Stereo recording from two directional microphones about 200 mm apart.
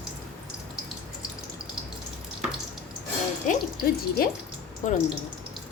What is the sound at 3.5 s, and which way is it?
Speech, 50° left (ahead or behind).